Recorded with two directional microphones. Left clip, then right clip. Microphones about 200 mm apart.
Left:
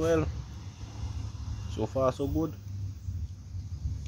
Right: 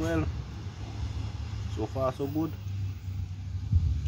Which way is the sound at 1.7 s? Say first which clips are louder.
Left 2 dB; 50° left (ahead or behind).